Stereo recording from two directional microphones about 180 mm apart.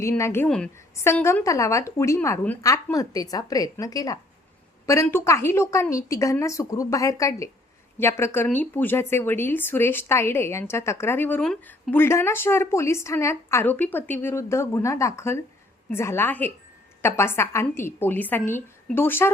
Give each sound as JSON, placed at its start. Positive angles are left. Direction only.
{"t": 0.0, "sound": "a woman's voice", "side_deg": 15}